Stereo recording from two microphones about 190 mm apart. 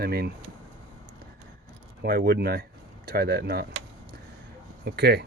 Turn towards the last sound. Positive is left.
turn(degrees=-60)  # may be behind; listen again after turning